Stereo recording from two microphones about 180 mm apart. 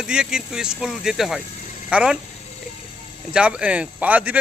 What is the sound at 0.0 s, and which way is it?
Speech, 5° right (ahead or behind).